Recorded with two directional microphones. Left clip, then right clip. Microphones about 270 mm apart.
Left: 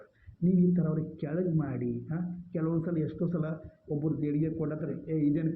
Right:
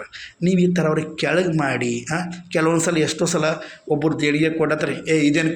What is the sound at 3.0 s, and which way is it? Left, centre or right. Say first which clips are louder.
A man's voice: right 15 dB; centre.